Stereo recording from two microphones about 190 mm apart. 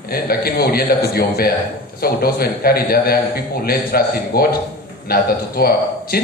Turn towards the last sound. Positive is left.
turn(degrees=55)  # may be behind; listen again after turning